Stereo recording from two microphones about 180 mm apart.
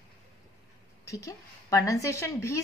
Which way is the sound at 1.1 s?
15° left (ahead or behind).